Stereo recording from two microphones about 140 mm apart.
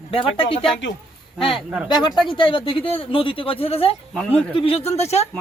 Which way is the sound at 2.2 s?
35° left (ahead or behind).